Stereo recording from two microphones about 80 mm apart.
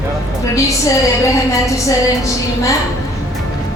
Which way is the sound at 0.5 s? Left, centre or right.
Left.